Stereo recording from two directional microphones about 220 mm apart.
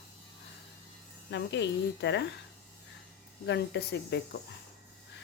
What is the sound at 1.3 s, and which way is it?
Speech, 50° left (ahead or behind).